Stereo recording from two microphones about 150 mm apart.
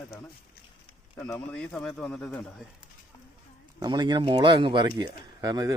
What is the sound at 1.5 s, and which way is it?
A man's voice, 5° left (ahead or behind).